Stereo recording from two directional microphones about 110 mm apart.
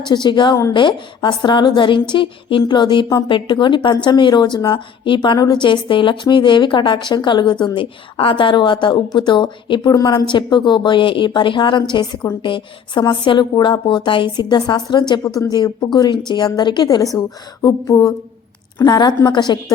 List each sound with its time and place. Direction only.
0.0 s a woman's voice: 45° left (ahead or behind)
10.2 s a woman's voice: 45° left (ahead or behind)